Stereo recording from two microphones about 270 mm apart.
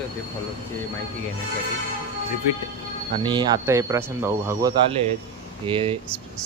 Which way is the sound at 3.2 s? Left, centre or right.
Centre.